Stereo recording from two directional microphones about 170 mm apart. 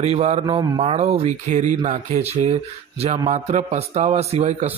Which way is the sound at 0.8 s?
40° right (ahead or behind).